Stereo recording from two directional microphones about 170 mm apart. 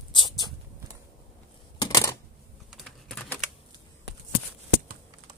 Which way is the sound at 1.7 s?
20° left (ahead or behind).